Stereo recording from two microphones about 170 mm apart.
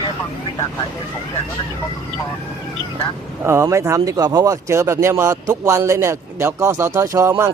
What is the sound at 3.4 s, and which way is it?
Speech, 15° right (ahead or behind).